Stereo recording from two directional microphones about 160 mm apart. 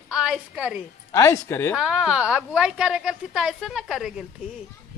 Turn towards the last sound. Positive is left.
turn(degrees=-5)  # may be behind; listen again after turning